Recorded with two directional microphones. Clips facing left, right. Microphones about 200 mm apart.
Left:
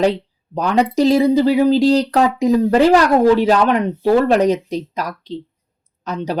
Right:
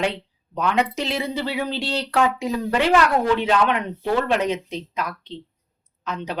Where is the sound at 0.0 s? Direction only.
35° left (ahead or behind).